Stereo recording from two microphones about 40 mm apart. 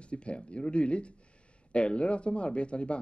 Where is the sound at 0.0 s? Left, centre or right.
Left.